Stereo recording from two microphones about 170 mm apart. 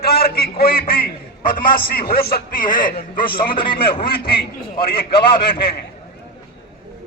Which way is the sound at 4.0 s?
65° left (ahead or behind).